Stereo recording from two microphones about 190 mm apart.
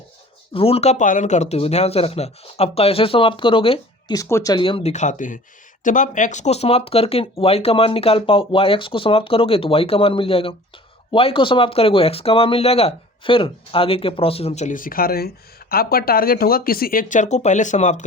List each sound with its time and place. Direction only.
0.5 s speech: 30° left (ahead or behind)
4.2 s speech: 15° left (ahead or behind); by 18.0 s 40° left (ahead or behind)